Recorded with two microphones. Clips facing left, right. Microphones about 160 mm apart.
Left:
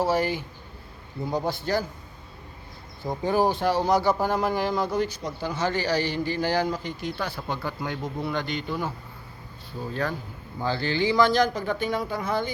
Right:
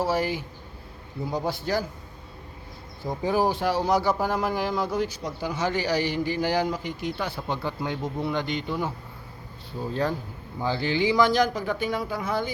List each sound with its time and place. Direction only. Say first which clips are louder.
0.0 s speech: left 1 dB; 5° right (ahead or behind)
3.2 s speech: left 1 dB; 5° right (ahead or behind)
9.9 s speech: right 2 dB; 30° right (ahead or behind)
10.6 s speech: right 1 dB; 15° right (ahead or behind)